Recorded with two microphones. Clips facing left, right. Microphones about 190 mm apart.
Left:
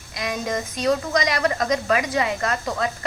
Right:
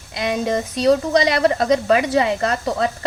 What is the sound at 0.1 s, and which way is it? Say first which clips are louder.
A woman's voice: right 6 dB; 30° right (ahead or behind).